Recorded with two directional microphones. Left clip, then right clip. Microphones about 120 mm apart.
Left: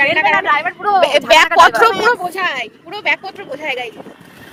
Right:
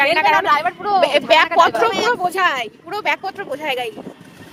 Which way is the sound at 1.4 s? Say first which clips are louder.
Left 5 dB; 90° left.